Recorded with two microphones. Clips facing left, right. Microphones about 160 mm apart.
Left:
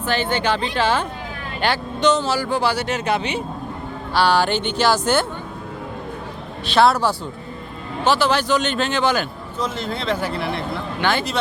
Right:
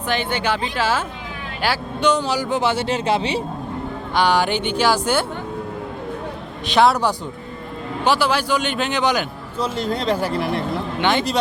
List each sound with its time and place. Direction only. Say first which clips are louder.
0.1 s a man's voice: left 1 dB; 15° right (ahead or behind); by 3.4 s 30° right (ahead or behind)
4.1 s a man's voice: left 1 dB; 15° right (ahead or behind)
6.7 s a man's voice: even; 15° right (ahead or behind)
9.6 s speech: right 3 dB; 35° right (ahead or behind)
11.0 s a man's voice: right 1 dB; 20° right (ahead or behind)